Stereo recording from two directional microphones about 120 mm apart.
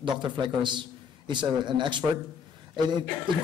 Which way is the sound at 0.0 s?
40° right (ahead or behind).